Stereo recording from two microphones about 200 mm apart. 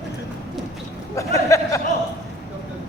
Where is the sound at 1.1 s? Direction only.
15° left (ahead or behind).